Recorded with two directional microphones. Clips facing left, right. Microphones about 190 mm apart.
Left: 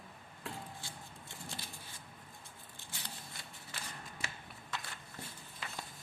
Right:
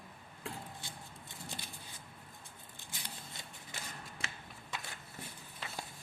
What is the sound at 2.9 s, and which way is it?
Scissors, 20° right (ahead or behind).